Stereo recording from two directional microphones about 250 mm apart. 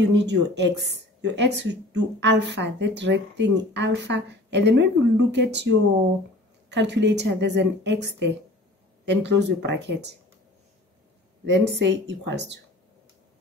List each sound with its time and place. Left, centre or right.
0.0 s speech: right
11.4 s speech: right